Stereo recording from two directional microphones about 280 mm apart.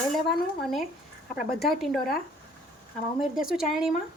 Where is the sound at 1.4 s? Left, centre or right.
Left.